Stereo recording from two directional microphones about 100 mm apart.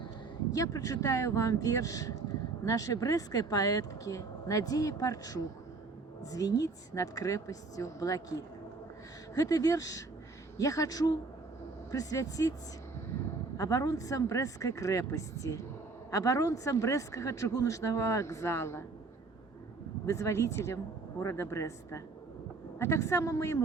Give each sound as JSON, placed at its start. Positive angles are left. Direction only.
{"t": 0.5, "sound": "speech", "side_deg": 35}
{"t": 9.3, "sound": "speech", "side_deg": 35}
{"t": 13.6, "sound": "speech", "side_deg": 35}
{"t": 20.1, "sound": "a man's voice", "side_deg": 30}